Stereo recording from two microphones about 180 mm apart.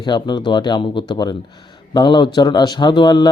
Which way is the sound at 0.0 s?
25° left (ahead or behind).